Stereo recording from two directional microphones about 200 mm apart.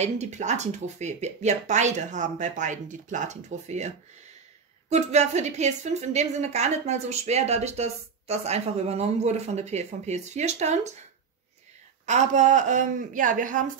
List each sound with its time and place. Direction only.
0.0 s a woman's voice: 35° right (ahead or behind)
12.1 s a woman's voice: 35° right (ahead or behind)